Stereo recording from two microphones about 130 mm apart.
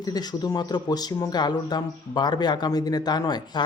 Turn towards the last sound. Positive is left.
turn(degrees=35)  # may be behind; listen again after turning